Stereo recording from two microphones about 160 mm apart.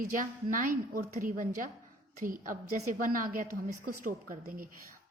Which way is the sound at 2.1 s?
60° right (ahead or behind).